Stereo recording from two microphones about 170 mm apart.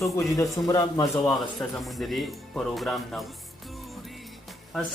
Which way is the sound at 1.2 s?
Centre (ahead or behind).